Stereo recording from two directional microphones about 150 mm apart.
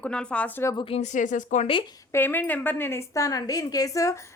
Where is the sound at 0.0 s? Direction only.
5° left (ahead or behind).